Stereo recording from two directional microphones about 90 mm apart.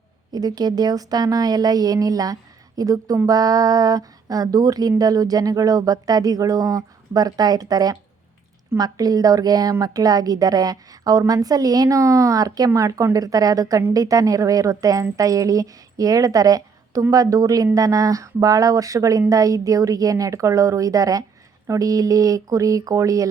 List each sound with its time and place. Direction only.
0.3 s speech: 50° right (ahead or behind)